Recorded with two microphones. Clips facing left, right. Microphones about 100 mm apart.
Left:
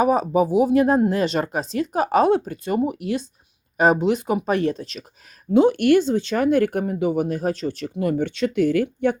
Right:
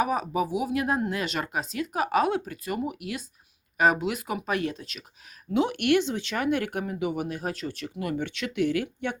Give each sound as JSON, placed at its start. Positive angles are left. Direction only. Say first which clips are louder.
{"t": 0.0, "sound": "speech", "louder": "left 8 dB", "side_deg": 35}